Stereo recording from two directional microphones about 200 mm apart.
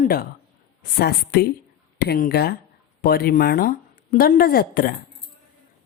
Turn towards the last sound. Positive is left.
turn(degrees=45)  # may be behind; listen again after turning